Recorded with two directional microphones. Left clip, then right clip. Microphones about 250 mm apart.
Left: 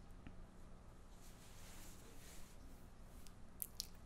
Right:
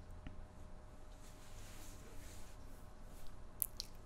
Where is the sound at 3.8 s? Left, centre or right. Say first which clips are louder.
Even; centre.